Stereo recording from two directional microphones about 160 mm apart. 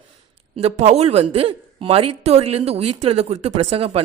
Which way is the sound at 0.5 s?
40° right (ahead or behind).